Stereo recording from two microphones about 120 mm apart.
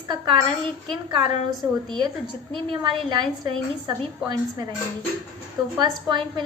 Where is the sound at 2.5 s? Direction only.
45° right (ahead or behind).